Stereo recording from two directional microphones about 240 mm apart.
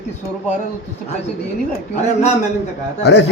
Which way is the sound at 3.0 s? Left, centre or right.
Left.